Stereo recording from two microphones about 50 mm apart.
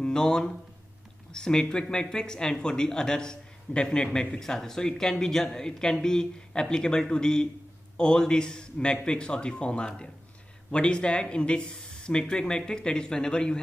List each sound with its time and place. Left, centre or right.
0.0 s a man's voice: centre